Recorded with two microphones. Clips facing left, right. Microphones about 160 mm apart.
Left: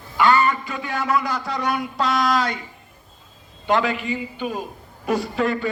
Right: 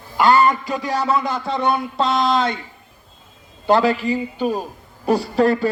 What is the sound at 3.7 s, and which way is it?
Speech, 35° right (ahead or behind).